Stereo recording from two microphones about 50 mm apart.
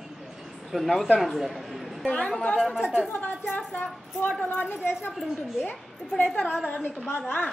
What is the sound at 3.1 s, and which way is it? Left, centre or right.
A woman's voice, left.